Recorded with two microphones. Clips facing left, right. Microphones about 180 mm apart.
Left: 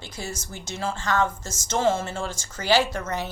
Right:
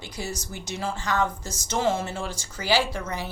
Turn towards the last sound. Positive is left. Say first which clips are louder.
# left 3 dB
turn(degrees=-10)  # may be behind; listen again after turning